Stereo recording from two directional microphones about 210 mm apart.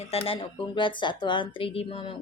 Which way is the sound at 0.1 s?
25° left (ahead or behind).